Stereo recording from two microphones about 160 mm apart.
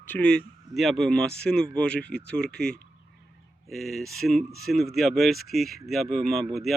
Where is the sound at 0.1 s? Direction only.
5° left (ahead or behind).